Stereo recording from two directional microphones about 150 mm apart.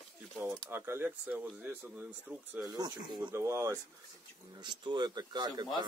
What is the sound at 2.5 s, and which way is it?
Speech, 25° right (ahead or behind).